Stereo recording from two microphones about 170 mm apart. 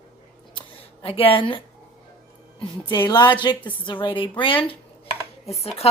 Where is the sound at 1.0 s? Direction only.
35° left (ahead or behind).